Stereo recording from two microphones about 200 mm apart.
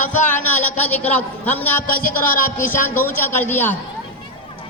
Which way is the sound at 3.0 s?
10° left (ahead or behind).